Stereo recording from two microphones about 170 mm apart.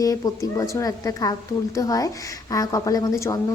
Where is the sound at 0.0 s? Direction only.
20° left (ahead or behind).